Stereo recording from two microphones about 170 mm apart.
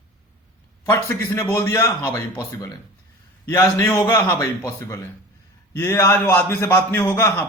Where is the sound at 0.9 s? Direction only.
15° left (ahead or behind).